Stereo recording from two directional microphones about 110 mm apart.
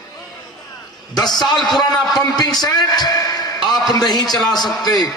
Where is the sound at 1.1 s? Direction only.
40° left (ahead or behind).